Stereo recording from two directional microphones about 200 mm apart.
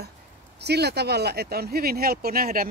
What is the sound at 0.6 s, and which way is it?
Speech, 55° right (ahead or behind).